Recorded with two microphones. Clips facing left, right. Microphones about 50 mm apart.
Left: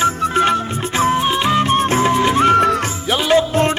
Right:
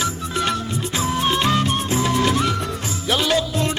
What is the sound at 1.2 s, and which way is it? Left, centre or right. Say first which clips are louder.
Music: left 3 dB; centre.